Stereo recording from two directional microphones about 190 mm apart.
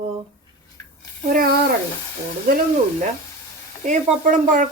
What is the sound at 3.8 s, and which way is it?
Speech, 40° right (ahead or behind).